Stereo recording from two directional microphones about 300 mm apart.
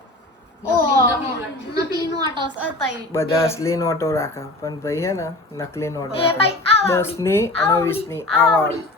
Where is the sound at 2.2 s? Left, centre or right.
Centre.